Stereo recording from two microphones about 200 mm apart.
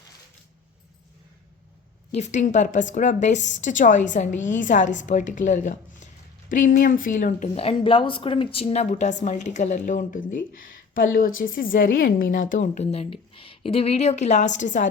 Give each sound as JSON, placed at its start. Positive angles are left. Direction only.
{"t": 2.1, "sound": "a woman's voice", "side_deg": 35}